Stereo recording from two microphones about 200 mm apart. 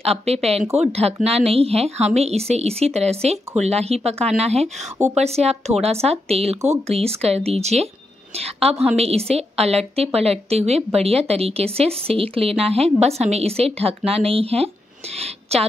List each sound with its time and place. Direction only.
0.0 s a woman's voice: 30° right (ahead or behind)